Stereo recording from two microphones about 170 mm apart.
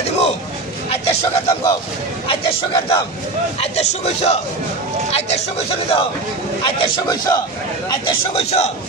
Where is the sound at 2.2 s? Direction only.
30° left (ahead or behind).